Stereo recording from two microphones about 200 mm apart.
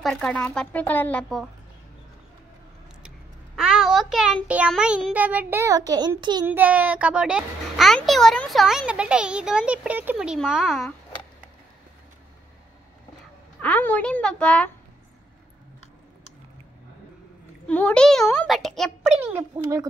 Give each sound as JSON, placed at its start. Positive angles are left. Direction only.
{"t": 0.0, "sound": "speech", "side_deg": 5}
{"t": 3.5, "sound": "a child's voice", "side_deg": 0}
{"t": 6.4, "sound": "a child's voice", "side_deg": -10}
{"t": 13.6, "sound": "speech", "side_deg": 10}
{"t": 17.6, "sound": "a child's voice", "side_deg": 5}
{"t": 19.1, "sound": "a child's voice", "side_deg": -10}